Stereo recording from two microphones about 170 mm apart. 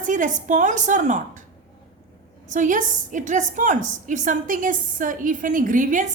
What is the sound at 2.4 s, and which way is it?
A woman's voice, 50° right (ahead or behind).